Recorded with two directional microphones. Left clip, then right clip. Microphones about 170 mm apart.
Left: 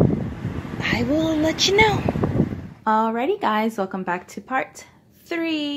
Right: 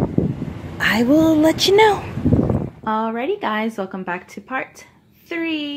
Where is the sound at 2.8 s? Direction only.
5° left (ahead or behind).